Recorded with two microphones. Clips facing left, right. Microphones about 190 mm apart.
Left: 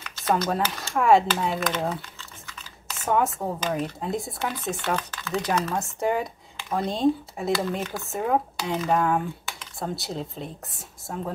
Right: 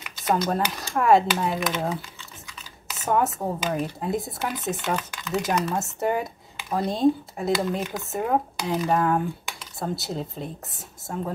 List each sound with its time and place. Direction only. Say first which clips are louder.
0.0 s a sound: even; 15° right (ahead or behind)
0.7 s speech: even; centre (ahead or behind)
4.8 s speech: even; 15° right (ahead or behind)
7.8 s speech: right 1 dB; 20° right (ahead or behind)
8.1 s speech: even; centre (ahead or behind)